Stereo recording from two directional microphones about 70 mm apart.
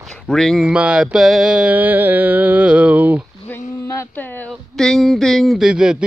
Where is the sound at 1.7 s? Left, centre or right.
Right.